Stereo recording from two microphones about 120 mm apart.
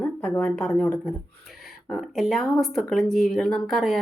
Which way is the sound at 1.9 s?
Centre (ahead or behind).